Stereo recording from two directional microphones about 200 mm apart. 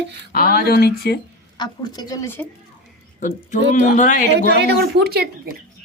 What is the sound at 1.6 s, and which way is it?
Speech, 20° left (ahead or behind).